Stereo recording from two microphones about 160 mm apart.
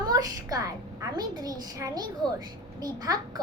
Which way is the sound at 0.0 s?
25° right (ahead or behind).